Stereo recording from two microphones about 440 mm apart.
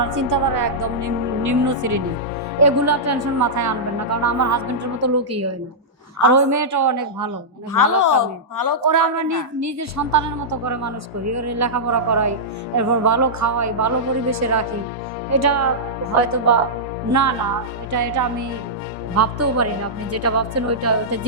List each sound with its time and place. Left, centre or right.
0.1 s a woman's voice: right
7.7 s a woman's voice: left
8.9 s a woman's voice: right
17.1 s a woman's voice: right